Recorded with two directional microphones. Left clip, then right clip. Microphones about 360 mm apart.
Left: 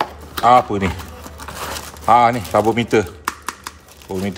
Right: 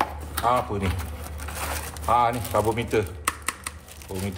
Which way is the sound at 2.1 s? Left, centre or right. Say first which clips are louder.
Left 9 dB; left.